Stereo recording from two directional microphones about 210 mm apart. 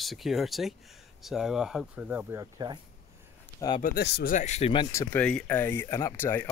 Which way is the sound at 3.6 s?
20° left (ahead or behind).